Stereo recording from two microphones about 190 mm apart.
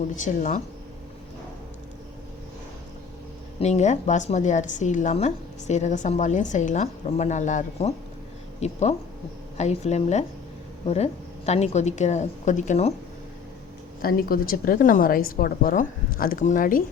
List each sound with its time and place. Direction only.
0.3 s a woman's voice: 40° left (ahead or behind)
3.6 s a woman's voice: 35° left (ahead or behind)
14.0 s a woman's voice: 50° left (ahead or behind)